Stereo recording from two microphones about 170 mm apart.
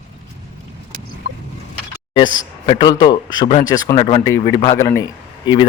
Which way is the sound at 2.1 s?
25° left (ahead or behind).